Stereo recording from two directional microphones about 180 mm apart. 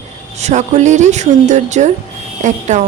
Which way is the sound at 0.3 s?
40° right (ahead or behind).